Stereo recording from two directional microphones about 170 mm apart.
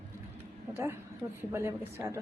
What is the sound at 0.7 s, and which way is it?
A man's voice, 15° right (ahead or behind).